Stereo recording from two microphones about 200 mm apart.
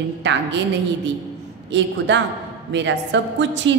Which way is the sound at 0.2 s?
65° right (ahead or behind).